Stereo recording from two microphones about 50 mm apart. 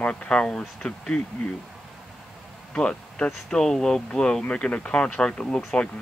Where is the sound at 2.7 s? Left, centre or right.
Centre.